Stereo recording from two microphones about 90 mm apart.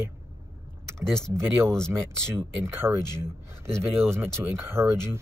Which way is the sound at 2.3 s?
30° right (ahead or behind).